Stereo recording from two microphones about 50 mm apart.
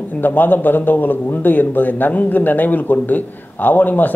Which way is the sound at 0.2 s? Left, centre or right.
Left.